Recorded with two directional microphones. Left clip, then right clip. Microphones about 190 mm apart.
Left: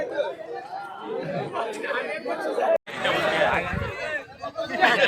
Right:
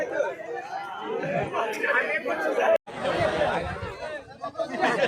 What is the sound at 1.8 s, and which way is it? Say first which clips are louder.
Speech: right 3 dB; 20° right (ahead or behind).